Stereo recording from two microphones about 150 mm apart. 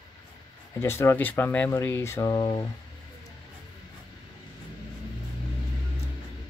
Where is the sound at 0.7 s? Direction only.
15° left (ahead or behind).